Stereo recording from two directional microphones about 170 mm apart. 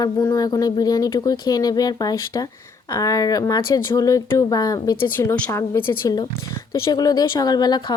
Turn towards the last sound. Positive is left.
turn(degrees=25)  # may be behind; listen again after turning